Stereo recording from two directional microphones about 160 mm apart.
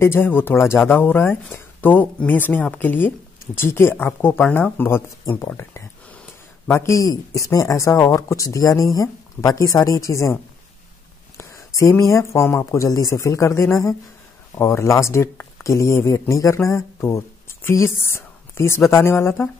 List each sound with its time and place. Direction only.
0.0 s speech: 15° left (ahead or behind)
18.0 s a sound: 15° left (ahead or behind)
18.9 s speech: 15° left (ahead or behind)